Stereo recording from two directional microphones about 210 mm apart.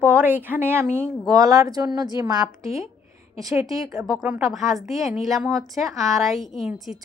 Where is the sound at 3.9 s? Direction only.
Centre (ahead or behind).